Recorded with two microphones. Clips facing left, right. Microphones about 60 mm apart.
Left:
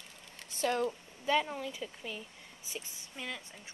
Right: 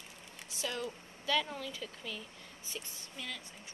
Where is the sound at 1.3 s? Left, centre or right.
Left.